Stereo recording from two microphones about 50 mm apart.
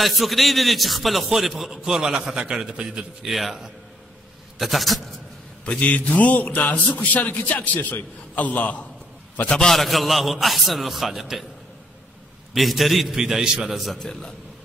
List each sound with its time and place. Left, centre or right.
0.0 s a man's voice: centre
3.3 s a man's voice: centre
5.7 s speech: left
9.5 s a man's voice: centre
9.8 s a man's voice: centre
12.5 s a man's voice: centre
13.9 s a man's voice: centre